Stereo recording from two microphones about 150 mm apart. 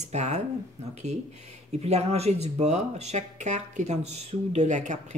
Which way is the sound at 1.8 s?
45° right (ahead or behind).